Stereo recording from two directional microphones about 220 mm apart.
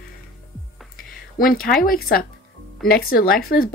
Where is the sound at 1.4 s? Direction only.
40° left (ahead or behind).